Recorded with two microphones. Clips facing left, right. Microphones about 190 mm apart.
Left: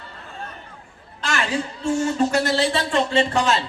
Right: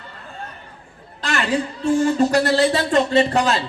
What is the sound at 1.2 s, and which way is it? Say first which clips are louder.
A man's voice: right 3 dB; 35° right (ahead or behind).